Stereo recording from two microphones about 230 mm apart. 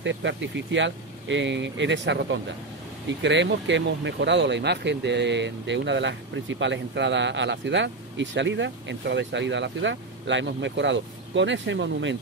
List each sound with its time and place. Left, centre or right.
0.0 s speech: right